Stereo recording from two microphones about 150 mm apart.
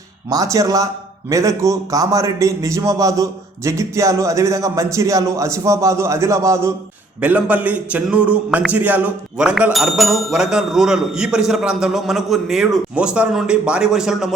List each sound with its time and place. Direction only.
0.3 s a man's voice: 20° right (ahead or behind); by 14.3 s 5° right (ahead or behind)